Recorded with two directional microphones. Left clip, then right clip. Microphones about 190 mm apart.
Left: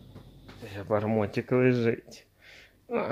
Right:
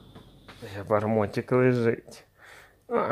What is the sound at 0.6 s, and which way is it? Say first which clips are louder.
Speech: right 3 dB; 10° right (ahead or behind).